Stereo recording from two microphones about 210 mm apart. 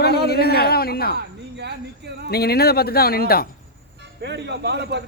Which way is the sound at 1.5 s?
55° right (ahead or behind).